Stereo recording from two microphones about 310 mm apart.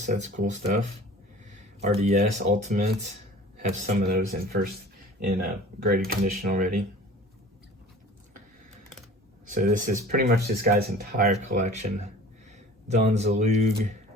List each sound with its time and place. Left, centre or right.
0.0 s speech: right
9.5 s speech: right